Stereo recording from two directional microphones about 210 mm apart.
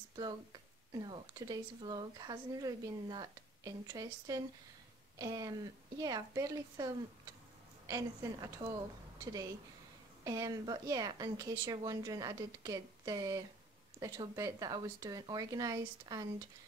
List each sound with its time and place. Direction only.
0.1 s speech: 20° right (ahead or behind)